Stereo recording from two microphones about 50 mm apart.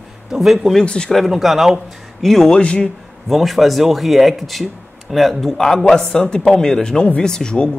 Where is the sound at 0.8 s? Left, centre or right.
Left.